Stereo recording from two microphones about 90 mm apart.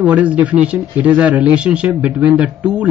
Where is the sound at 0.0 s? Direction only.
15° right (ahead or behind).